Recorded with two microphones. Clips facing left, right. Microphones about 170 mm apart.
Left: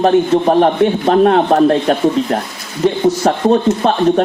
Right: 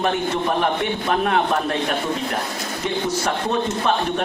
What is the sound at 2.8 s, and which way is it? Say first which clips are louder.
Speech: left 11 dB; 35° left (ahead or behind).